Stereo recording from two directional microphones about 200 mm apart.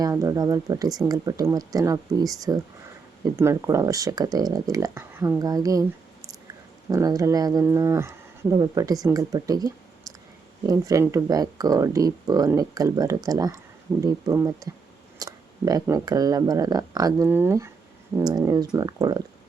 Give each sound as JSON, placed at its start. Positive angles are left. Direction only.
{"t": 0.0, "sound": "speech", "side_deg": -15}
{"t": 6.9, "sound": "speech", "side_deg": -15}